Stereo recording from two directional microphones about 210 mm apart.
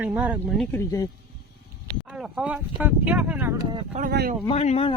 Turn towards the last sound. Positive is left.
turn(degrees=30)  # may be behind; listen again after turning